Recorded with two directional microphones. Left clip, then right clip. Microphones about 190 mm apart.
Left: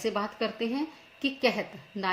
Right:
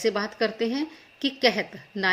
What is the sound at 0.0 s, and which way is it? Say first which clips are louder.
A woman's voice: right 5 dB; 45° right (ahead or behind).